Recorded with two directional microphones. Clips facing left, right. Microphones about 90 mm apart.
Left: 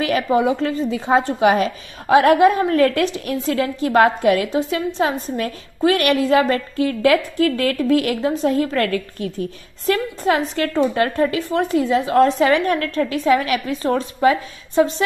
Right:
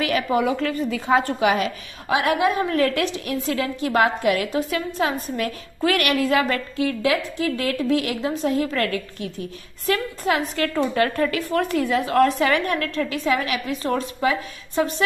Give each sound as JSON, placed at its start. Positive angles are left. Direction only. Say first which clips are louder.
{"t": 0.0, "sound": "a woman's voice", "louder": "left 3 dB", "side_deg": 30}
{"t": 9.8, "sound": "a woman's voice", "louder": "left 4 dB", "side_deg": 35}